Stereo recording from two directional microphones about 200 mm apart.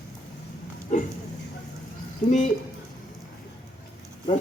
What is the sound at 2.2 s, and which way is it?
Speech, 35° left (ahead or behind).